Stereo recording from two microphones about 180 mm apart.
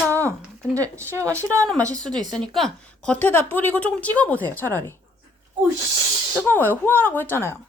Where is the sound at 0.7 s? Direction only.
15° right (ahead or behind).